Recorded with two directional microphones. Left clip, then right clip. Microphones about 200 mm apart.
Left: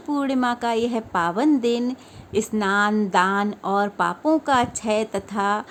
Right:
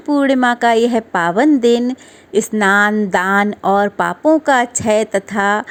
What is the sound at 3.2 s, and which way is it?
A woman's voice, 30° right (ahead or behind).